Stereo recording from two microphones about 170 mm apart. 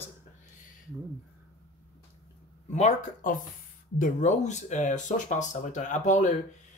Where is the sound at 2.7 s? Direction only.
40° left (ahead or behind).